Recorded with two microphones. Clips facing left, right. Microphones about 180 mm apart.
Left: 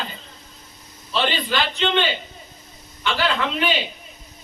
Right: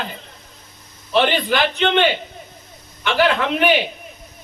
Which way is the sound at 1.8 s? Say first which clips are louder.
Right 3 dB; 60° right (ahead or behind).